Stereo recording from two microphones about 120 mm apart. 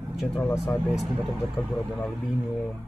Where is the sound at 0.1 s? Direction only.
Centre (ahead or behind).